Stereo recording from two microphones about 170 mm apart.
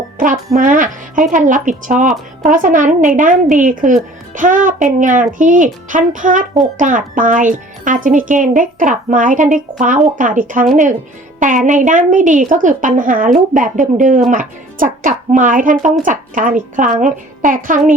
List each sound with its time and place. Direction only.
0.2 s speech: 50° right (ahead or behind)